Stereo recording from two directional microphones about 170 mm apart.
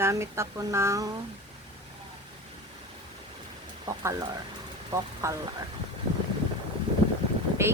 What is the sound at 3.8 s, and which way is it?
Speech, 20° right (ahead or behind).